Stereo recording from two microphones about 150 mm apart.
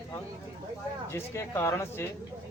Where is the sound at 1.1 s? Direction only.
15° left (ahead or behind).